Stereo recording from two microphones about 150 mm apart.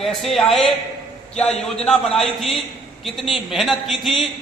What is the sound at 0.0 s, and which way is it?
A man's voice, centre (ahead or behind).